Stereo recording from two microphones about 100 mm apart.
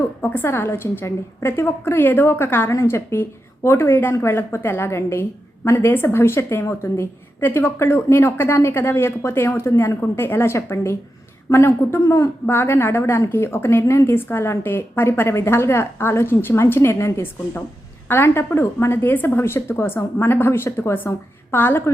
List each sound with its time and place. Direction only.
0.2 s a woman's voice: 20° left (ahead or behind)